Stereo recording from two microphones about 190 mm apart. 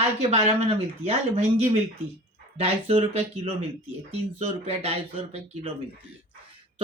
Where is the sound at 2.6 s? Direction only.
30° right (ahead or behind).